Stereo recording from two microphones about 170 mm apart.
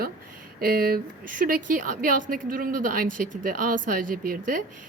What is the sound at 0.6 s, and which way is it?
A woman's voice, 60° right (ahead or behind).